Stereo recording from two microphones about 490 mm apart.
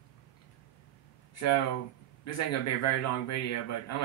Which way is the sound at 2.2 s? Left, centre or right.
Left.